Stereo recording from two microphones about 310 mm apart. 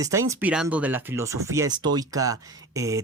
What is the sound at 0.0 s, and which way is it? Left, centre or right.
Speech, centre.